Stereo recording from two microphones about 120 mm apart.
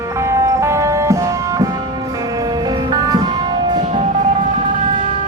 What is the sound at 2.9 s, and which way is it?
Music, 35° right (ahead or behind).